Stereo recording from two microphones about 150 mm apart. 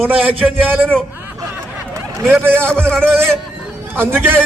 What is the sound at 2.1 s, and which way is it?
Speech, 15° right (ahead or behind).